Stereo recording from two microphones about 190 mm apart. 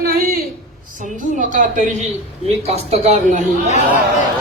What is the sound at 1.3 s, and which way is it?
A man's voice, 40° right (ahead or behind).